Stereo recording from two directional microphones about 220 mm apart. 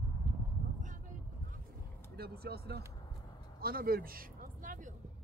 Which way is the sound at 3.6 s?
45° right (ahead or behind).